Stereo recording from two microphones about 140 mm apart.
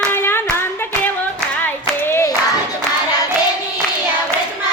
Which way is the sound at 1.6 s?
15° left (ahead or behind).